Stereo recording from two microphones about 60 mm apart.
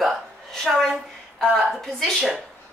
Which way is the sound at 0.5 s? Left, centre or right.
Centre.